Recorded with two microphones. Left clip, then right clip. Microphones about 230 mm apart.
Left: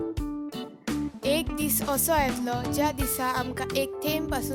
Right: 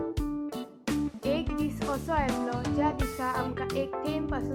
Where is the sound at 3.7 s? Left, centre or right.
Left.